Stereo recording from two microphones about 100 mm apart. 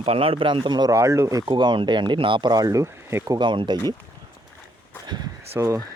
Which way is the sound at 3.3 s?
55° right (ahead or behind).